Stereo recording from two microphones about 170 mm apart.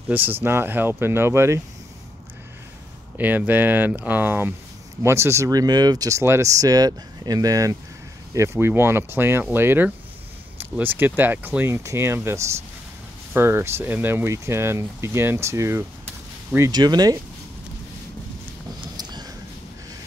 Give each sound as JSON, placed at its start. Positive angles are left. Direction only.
{"t": 0.1, "sound": "speech", "side_deg": -10}
{"t": 3.2, "sound": "speech", "side_deg": -10}
{"t": 18.9, "sound": "a sound", "side_deg": -25}